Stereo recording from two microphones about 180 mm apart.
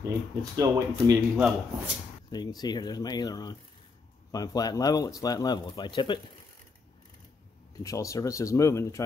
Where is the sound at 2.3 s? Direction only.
20° left (ahead or behind).